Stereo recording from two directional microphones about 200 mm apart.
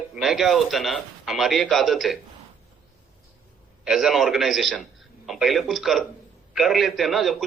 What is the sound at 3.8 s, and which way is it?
A man's voice, centre (ahead or behind).